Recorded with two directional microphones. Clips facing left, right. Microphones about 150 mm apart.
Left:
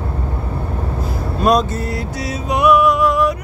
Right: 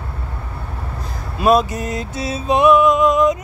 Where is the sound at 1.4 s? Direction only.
5° right (ahead or behind).